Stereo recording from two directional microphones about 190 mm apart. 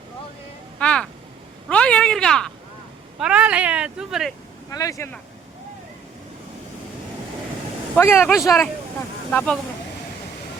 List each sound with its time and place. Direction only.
0.8 s vehicle: 5° left (ahead or behind)
1.7 s a sound: 5° left (ahead or behind)
3.2 s speech: 5° right (ahead or behind)
4.7 s speech: 15° left (ahead or behind)
7.9 s speech: 10° left (ahead or behind)
8.4 s speech: centre (ahead or behind)